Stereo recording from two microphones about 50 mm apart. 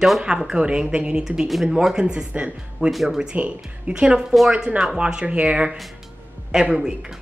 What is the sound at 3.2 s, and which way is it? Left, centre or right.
A woman's voice, right.